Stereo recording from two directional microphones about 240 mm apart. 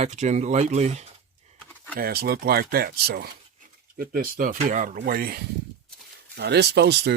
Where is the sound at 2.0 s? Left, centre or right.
Right.